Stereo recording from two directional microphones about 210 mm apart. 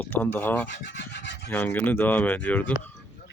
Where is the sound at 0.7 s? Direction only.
55° left (ahead or behind).